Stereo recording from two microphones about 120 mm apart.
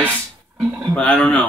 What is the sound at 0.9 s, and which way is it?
Speech, 10° left (ahead or behind).